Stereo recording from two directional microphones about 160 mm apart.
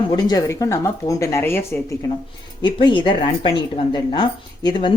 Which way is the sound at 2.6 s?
30° left (ahead or behind).